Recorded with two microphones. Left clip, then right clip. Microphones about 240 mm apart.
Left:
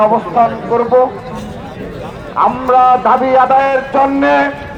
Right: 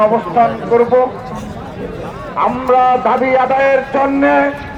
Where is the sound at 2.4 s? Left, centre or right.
Left.